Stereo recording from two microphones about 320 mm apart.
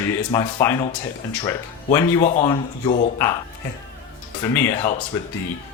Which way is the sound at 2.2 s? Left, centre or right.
Centre.